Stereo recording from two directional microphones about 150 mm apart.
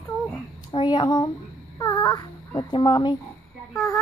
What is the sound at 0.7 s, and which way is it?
A child's voice, 30° left (ahead or behind).